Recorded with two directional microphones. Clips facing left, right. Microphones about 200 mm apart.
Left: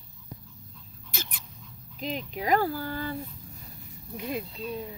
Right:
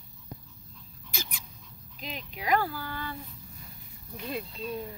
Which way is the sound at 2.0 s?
40° left (ahead or behind).